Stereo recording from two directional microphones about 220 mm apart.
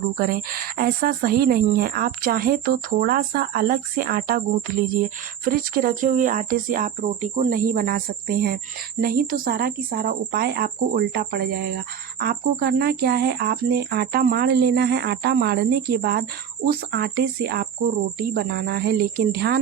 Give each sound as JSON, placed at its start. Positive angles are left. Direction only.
{"t": 0.2, "sound": "speech", "side_deg": -40}